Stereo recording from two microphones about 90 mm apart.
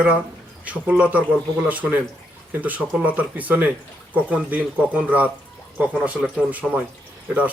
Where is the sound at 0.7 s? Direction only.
15° right (ahead or behind).